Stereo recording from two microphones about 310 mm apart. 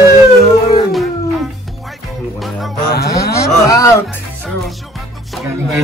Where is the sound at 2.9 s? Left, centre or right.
Left.